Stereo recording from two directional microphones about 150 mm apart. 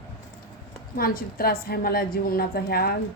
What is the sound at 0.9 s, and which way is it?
A woman's voice, 75° left (ahead or behind).